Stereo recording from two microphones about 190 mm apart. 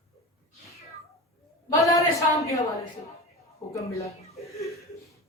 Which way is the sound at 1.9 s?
15° left (ahead or behind).